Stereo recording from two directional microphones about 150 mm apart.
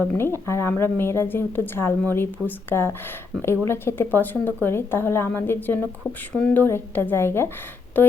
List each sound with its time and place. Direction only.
0.0 s a woman's voice: 15° left (ahead or behind)